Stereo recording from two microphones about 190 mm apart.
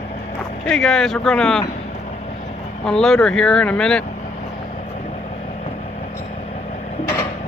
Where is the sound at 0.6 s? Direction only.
5° left (ahead or behind).